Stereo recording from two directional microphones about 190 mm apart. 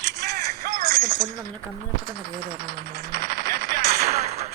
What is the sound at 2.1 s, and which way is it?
Music, 50° right (ahead or behind).